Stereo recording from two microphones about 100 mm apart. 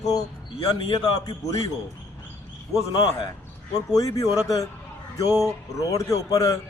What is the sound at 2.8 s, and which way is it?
Speech, 35° left (ahead or behind).